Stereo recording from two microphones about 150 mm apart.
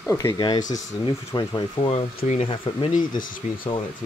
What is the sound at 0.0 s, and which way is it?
Speech, 20° left (ahead or behind).